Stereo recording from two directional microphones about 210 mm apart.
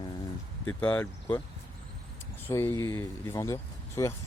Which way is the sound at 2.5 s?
15° left (ahead or behind).